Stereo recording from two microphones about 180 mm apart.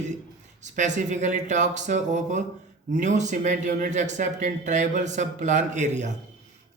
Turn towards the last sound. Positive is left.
turn(degrees=-40)  # may be behind; listen again after turning